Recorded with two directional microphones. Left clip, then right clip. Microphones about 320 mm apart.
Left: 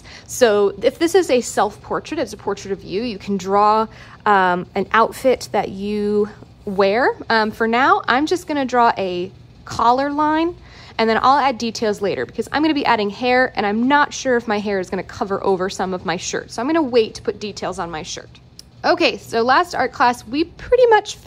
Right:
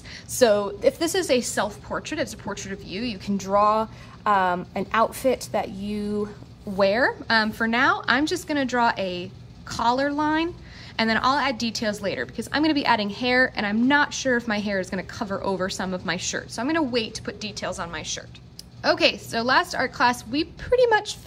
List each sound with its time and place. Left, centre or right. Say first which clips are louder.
0.3 s a woman's voice: left 5 dB; left